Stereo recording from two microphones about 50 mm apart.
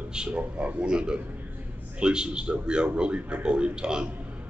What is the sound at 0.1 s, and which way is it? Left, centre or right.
Speech, centre.